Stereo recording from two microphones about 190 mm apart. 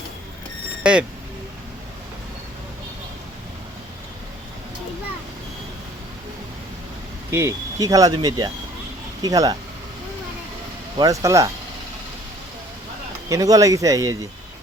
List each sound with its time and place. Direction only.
0.8 s speech: 5° right (ahead or behind)
7.3 s speech: 15° right (ahead or behind)
10.9 s speech: 20° right (ahead or behind)
13.2 s speech: 20° right (ahead or behind)